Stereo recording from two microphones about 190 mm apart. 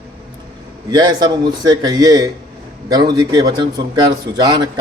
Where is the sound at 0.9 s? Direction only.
20° right (ahead or behind).